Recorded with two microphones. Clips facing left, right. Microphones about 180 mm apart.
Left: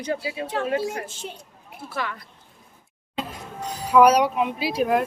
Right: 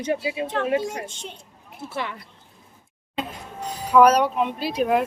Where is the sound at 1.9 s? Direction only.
25° right (ahead or behind).